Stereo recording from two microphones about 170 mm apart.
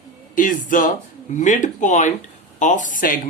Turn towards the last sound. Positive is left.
turn(degrees=55)  # may be behind; listen again after turning